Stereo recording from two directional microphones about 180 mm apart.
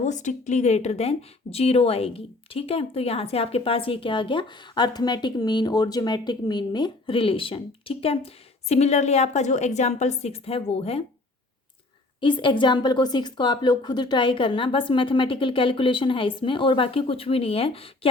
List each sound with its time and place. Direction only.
0.0 s a woman's voice: 40° left (ahead or behind)
12.2 s a woman's voice: 25° left (ahead or behind)